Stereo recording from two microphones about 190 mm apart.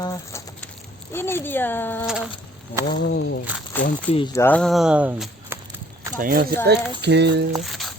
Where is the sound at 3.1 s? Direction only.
65° left (ahead or behind).